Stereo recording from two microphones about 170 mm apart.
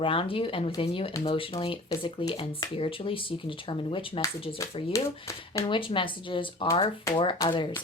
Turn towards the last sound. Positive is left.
turn(degrees=30)  # may be behind; listen again after turning